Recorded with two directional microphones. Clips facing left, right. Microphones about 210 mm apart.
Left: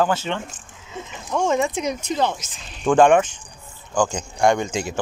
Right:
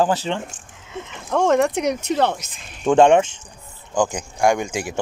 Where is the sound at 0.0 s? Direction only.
30° right (ahead or behind).